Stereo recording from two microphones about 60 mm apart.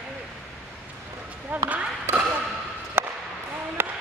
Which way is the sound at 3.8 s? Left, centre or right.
Right.